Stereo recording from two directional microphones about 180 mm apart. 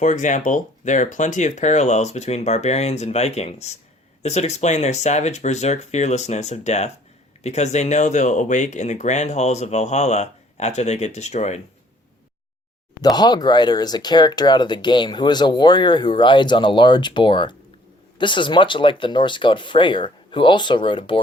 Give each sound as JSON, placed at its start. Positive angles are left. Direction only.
{"t": 0.0, "sound": "speech", "side_deg": 45}
{"t": 13.0, "sound": "speech", "side_deg": 20}